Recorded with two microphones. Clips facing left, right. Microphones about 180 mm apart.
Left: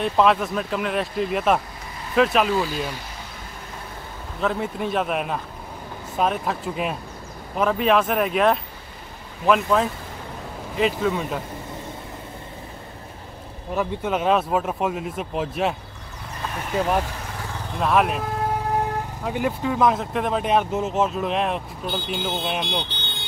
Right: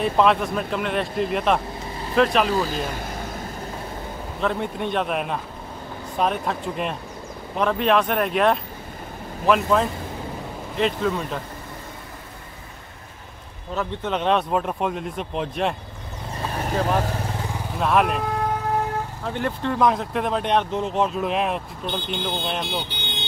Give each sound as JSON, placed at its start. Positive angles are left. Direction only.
{"t": 0.0, "sound": "speech", "side_deg": 0}
{"t": 2.5, "sound": "speech", "side_deg": -45}
{"t": 4.4, "sound": "speech", "side_deg": 0}
{"t": 13.7, "sound": "speech", "side_deg": 5}
{"t": 17.7, "sound": "speech", "side_deg": 0}
{"t": 19.2, "sound": "speech", "side_deg": 10}